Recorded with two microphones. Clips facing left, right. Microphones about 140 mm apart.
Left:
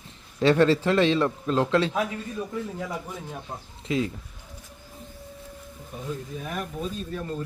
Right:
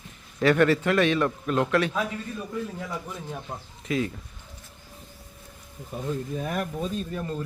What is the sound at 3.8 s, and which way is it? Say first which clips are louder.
Speech: left 1 dB; 25° left (ahead or behind).